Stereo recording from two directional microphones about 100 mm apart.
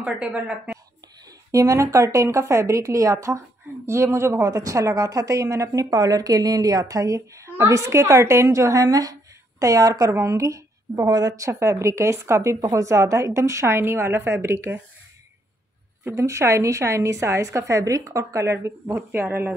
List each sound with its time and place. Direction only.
0.0 s a woman's voice: 10° right (ahead or behind)
1.5 s a woman's voice: 35° right (ahead or behind)
16.0 s a woman's voice: 25° right (ahead or behind)